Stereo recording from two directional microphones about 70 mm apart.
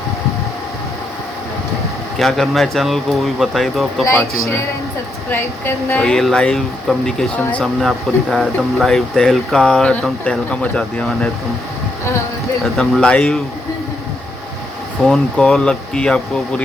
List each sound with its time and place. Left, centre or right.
2.1 s speech: centre
4.0 s a woman's voice: left
5.3 s a woman's voice: left
6.0 s speech: centre
12.6 s speech: centre
15.0 s speech: centre